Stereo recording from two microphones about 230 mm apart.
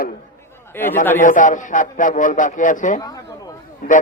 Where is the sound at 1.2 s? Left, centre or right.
Left.